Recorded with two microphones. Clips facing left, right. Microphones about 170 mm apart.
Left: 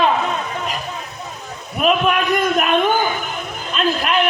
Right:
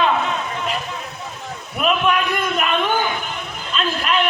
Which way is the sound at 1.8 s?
40° left (ahead or behind).